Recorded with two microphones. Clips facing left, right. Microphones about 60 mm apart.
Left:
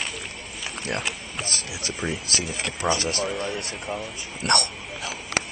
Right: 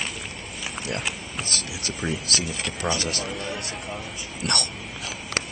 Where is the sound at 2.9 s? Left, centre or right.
Left.